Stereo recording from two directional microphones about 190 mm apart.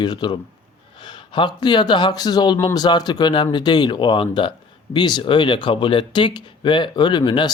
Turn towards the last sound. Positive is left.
turn(degrees=25)  # may be behind; listen again after turning